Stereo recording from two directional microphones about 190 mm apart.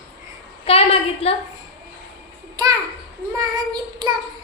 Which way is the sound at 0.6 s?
30° left (ahead or behind).